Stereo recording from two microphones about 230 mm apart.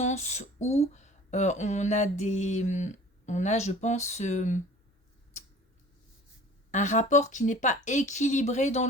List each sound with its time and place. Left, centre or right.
0.0 s speech: left
6.7 s speech: left